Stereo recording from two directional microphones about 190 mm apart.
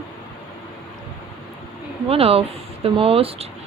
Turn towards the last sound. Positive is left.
turn(degrees=-30)  # may be behind; listen again after turning